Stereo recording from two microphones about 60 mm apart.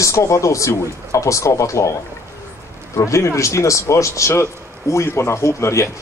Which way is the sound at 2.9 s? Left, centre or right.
Left.